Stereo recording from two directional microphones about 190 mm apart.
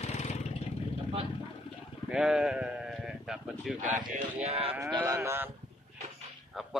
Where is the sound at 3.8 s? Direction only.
40° right (ahead or behind).